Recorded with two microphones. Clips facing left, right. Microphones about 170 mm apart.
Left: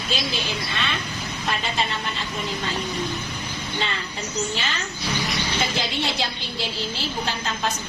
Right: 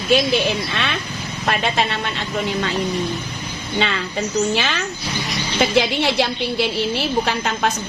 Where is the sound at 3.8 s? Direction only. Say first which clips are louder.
Right 10 dB; 75° right (ahead or behind).